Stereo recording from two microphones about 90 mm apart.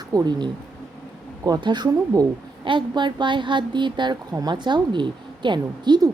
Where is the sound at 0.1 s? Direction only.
50° right (ahead or behind).